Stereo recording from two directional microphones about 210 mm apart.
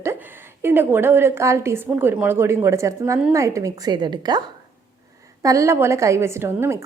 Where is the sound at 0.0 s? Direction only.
10° right (ahead or behind).